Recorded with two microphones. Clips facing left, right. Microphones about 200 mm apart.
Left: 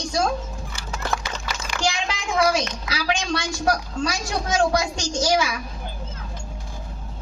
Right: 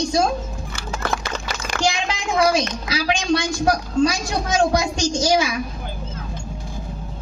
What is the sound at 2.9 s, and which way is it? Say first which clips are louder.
A woman's voice: right 5 dB; 25° right (ahead or behind).